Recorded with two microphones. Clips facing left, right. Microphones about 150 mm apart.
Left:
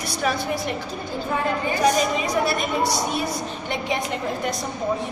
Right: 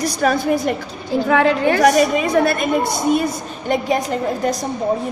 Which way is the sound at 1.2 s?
80° right.